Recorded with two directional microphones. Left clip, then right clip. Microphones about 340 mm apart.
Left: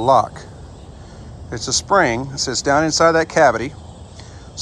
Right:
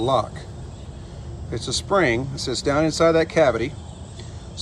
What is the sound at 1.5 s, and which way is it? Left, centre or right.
Speech, centre.